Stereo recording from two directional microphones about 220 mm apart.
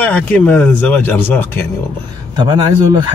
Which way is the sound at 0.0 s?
5° left (ahead or behind).